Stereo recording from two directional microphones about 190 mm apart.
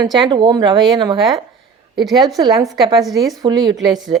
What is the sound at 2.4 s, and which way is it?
Speech, 20° right (ahead or behind).